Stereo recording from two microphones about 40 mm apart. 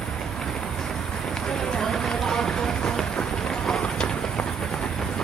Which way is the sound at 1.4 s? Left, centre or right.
Centre.